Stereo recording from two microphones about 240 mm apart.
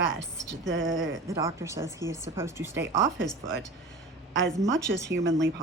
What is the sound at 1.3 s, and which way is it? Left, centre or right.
Speech, centre.